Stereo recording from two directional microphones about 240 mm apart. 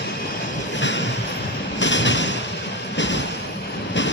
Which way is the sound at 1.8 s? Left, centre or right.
Left.